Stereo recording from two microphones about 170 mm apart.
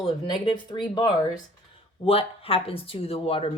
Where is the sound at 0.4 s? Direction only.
25° left (ahead or behind).